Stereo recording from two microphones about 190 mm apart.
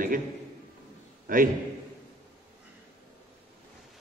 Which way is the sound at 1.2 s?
45° right (ahead or behind).